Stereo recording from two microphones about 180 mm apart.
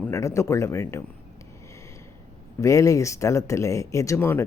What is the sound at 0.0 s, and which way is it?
Speech, 15° left (ahead or behind).